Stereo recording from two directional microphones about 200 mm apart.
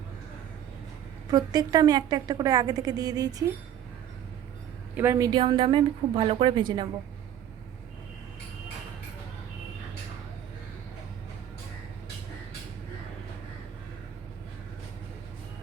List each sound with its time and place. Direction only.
1.3 s a woman's voice: 20° right (ahead or behind)
4.9 s a woman's voice: 15° right (ahead or behind)